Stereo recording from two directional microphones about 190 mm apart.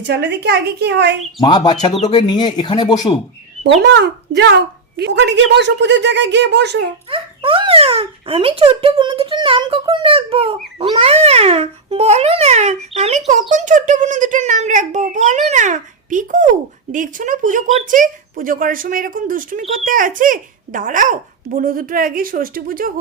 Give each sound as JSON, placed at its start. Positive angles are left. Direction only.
{"t": 0.0, "sound": "a woman's voice", "side_deg": -65}
{"t": 1.4, "sound": "speech", "side_deg": 20}
{"t": 3.8, "sound": "a woman's voice", "side_deg": -65}
{"t": 7.1, "sound": "a child's voice", "side_deg": -30}